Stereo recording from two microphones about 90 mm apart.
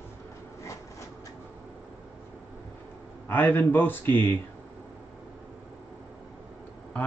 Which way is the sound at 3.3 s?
20° left (ahead or behind).